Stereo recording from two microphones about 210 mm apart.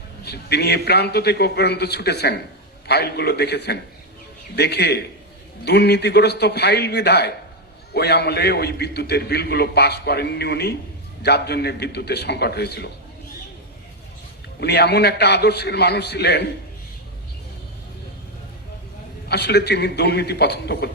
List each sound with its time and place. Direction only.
0.3 s a man's voice: 50° left (ahead or behind)
14.6 s a man's voice: 50° left (ahead or behind)
19.3 s a man's voice: 50° left (ahead or behind)